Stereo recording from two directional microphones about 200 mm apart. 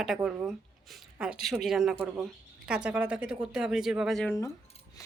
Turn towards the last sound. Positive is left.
turn(degrees=15)  # may be behind; listen again after turning